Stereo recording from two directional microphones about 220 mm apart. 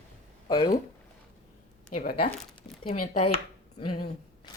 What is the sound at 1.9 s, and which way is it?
Speech, 40° left (ahead or behind).